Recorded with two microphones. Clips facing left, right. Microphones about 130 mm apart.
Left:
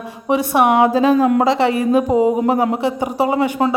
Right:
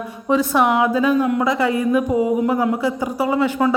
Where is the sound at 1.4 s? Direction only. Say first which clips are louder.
Left 3 dB; 30° left (ahead or behind).